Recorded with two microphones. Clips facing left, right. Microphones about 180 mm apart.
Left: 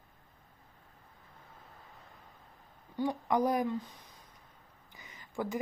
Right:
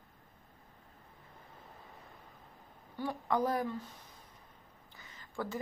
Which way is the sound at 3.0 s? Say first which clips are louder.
Left 3 dB; 15° left (ahead or behind).